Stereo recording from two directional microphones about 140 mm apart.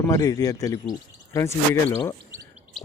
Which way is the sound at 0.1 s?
25° left (ahead or behind).